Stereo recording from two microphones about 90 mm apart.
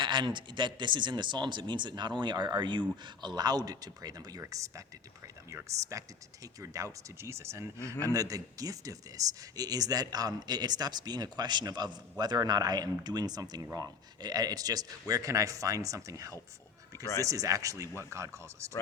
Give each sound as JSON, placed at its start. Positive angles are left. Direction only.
{"t": 0.0, "sound": "a man's voice", "side_deg": -60}